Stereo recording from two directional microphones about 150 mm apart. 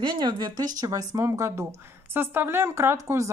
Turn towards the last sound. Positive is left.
turn(degrees=-20)  # may be behind; listen again after turning